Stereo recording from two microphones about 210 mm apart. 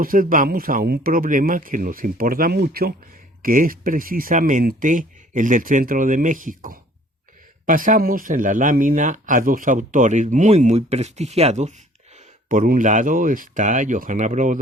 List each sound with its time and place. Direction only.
0.0 s speech: 40° right (ahead or behind)